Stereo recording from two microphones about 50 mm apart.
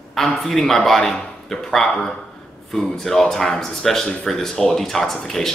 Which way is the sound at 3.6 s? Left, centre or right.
Centre.